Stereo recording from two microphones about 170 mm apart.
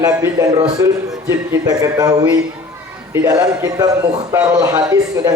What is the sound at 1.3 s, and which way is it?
A man's voice, 20° right (ahead or behind).